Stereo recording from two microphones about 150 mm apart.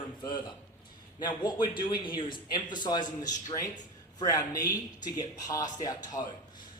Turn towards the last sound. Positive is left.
turn(degrees=25)  # may be behind; listen again after turning